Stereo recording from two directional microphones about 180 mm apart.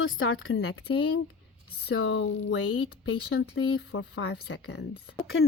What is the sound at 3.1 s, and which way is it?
Speech, 80° left.